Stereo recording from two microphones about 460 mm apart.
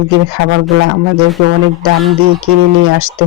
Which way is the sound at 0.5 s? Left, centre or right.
Right.